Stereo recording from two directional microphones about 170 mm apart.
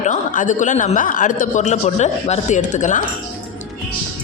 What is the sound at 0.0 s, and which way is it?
A woman's voice, 45° left (ahead or behind).